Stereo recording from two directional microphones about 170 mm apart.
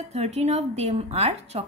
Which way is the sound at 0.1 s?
40° right (ahead or behind).